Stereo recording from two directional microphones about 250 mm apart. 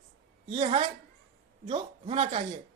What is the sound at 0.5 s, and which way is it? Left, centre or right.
A man's voice, right.